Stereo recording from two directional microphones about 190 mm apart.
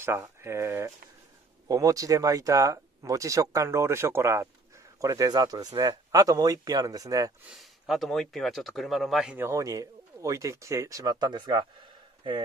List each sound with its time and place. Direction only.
0.0 s speech: 15° right (ahead or behind)
7.5 s speech: centre (ahead or behind); by 11.6 s 25° right (ahead or behind)